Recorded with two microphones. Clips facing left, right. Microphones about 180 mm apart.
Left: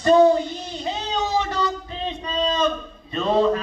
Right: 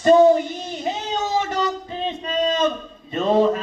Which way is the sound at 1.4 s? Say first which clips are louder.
Right 3 dB; 20° right (ahead or behind).